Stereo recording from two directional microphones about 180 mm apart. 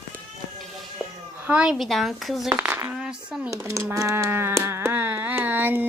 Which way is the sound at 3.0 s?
5° right (ahead or behind).